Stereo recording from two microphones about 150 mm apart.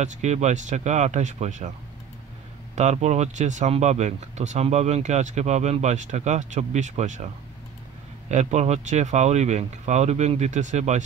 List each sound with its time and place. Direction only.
0.0 s speech: 50° right (ahead or behind)
2.7 s speech: 50° right (ahead or behind)
8.3 s speech: 50° right (ahead or behind)